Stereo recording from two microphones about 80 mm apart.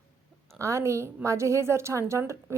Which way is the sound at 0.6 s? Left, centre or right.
Right.